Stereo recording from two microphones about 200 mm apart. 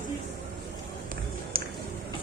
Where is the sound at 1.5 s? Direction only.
45° right (ahead or behind).